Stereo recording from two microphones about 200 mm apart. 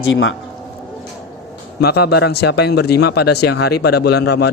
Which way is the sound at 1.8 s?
55° left (ahead or behind).